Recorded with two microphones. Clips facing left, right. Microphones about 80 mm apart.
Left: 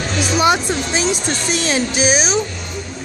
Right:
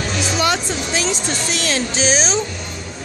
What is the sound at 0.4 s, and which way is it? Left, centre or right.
Speech, centre.